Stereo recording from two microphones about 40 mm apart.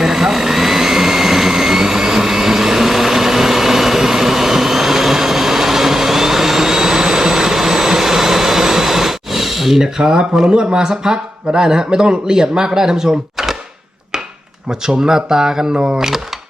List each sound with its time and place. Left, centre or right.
0.0 s vehicle: centre
14.7 s speech: centre